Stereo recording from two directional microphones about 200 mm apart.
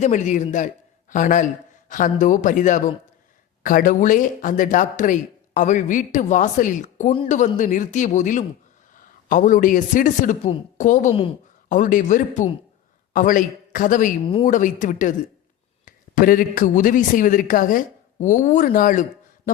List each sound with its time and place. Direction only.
0.0 s a man's voice: 40° left (ahead or behind)